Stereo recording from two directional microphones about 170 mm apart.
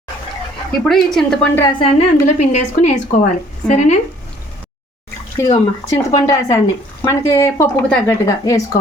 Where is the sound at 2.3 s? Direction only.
45° left (ahead or behind).